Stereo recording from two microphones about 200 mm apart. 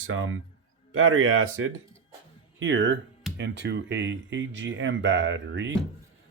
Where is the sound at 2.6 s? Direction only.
65° right (ahead or behind).